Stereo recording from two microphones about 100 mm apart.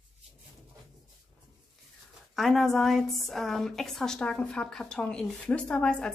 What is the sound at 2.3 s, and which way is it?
A woman's voice, centre (ahead or behind).